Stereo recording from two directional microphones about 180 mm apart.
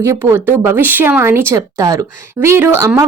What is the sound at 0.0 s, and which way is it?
Speech, 15° right (ahead or behind).